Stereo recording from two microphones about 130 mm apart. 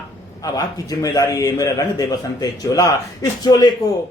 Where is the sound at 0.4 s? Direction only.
30° left (ahead or behind).